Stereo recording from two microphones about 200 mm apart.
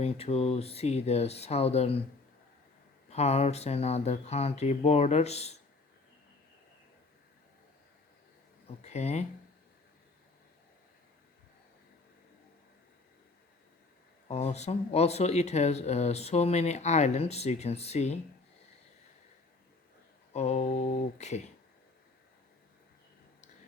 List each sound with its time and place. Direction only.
0.0 s speech: 30° left (ahead or behind)
3.1 s speech: 30° left (ahead or behind)
8.8 s speech: 35° left (ahead or behind)
14.3 s speech: 30° left (ahead or behind)
20.3 s speech: 35° left (ahead or behind)